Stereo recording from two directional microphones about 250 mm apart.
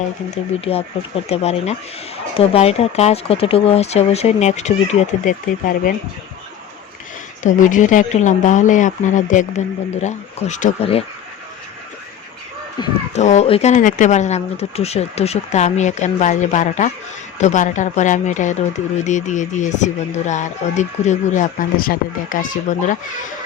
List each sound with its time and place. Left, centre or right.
0.6 s speech: left
7.4 s speech: left
12.8 s speech: left